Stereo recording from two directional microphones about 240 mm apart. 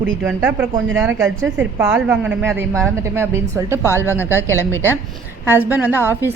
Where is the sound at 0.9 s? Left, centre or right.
Centre.